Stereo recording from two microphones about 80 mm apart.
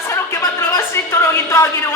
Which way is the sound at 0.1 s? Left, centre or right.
Left.